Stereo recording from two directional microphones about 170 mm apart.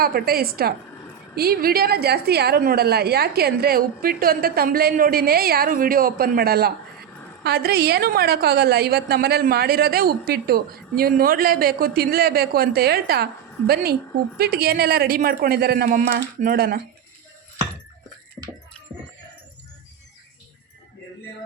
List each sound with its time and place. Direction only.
0.0 s a woman's voice: 65° right (ahead or behind)
14.3 s a woman's voice: 65° right (ahead or behind)